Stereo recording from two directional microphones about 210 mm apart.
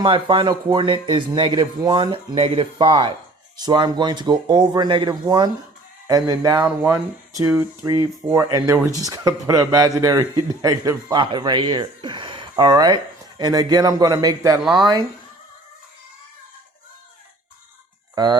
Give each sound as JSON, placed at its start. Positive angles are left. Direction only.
{"t": 0.0, "sound": "speech", "side_deg": -25}
{"t": 18.1, "sound": "speech", "side_deg": -20}